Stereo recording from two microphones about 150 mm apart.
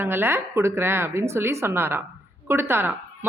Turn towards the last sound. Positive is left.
turn(degrees=-15)  # may be behind; listen again after turning